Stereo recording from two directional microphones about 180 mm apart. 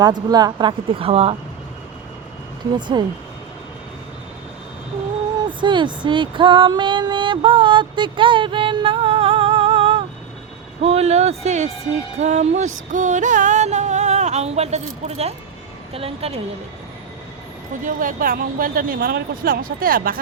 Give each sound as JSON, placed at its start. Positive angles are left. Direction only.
{"t": 0.0, "sound": "speech", "side_deg": -25}
{"t": 2.7, "sound": "speech", "side_deg": -25}
{"t": 5.5, "sound": "speech", "side_deg": -25}
{"t": 10.8, "sound": "music", "side_deg": -35}
{"t": 17.8, "sound": "speech", "side_deg": -50}